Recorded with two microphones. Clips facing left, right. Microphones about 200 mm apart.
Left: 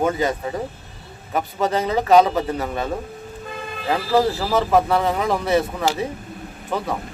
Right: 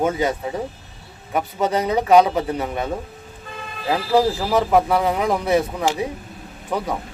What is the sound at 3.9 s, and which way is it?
Speech, 10° right (ahead or behind).